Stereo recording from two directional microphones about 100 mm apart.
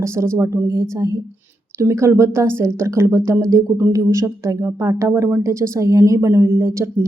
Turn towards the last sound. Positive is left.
turn(degrees=-30)  # may be behind; listen again after turning